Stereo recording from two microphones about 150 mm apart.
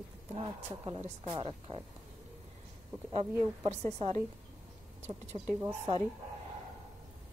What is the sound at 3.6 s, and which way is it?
Speech, 45° right (ahead or behind).